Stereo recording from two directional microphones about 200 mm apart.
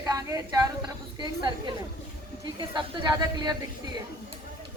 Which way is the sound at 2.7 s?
20° right (ahead or behind).